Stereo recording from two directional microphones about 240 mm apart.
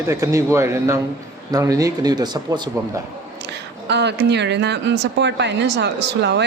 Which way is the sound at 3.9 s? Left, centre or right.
Right.